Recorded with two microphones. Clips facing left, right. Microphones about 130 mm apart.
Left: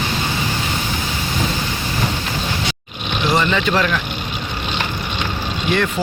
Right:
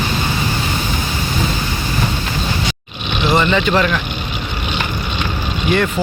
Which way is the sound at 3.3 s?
5° right (ahead or behind).